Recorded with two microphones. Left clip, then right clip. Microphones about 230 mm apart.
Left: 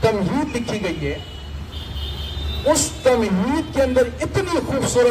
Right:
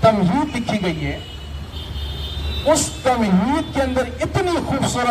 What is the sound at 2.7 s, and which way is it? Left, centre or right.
A woman's voice, left.